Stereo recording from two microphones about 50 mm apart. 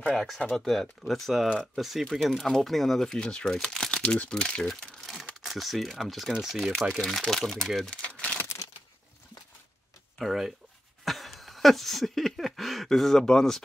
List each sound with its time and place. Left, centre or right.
0.1 s speech: centre
4.6 s crumpling: centre
5.4 s speech: centre
7.2 s speech: centre
7.9 s a sound: left
10.1 s speech: centre
11.1 s a sound: centre